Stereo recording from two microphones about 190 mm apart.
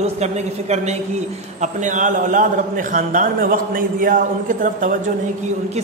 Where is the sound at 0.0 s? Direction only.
35° right (ahead or behind).